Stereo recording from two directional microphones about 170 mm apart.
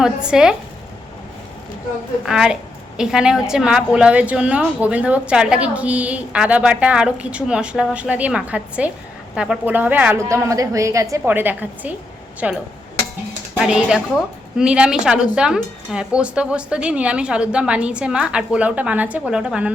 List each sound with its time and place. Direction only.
0.0 s a woman's voice: 5° right (ahead or behind)
2.2 s a woman's voice: 5° right (ahead or behind)
13.6 s a woman's voice: 5° right (ahead or behind)